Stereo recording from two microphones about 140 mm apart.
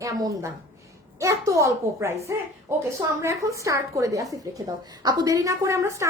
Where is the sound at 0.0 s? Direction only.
25° right (ahead or behind).